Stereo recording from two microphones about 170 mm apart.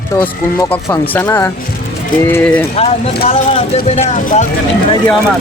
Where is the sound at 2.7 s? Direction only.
35° left (ahead or behind).